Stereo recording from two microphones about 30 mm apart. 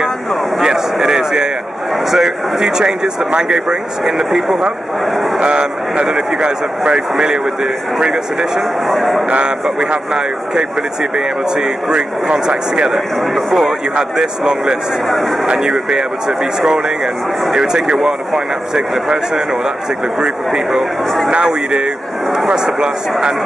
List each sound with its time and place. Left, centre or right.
1.0 s a sound: right
2.0 s speech: centre
5.4 s a man's voice: right
7.2 s speech: right
8.5 s speech: centre
9.8 s speech: right
12.9 s speech: centre
14.2 s speech: right
18.0 s speech: centre